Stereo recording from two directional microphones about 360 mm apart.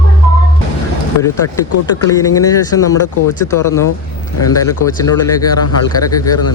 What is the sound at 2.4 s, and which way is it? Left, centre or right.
Speech, centre.